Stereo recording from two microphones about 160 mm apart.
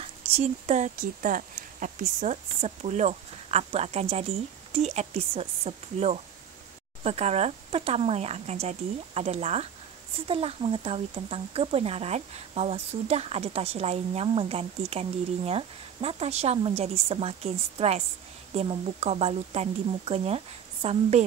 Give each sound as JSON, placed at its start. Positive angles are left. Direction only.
{"t": 0.0, "sound": "speech", "side_deg": -40}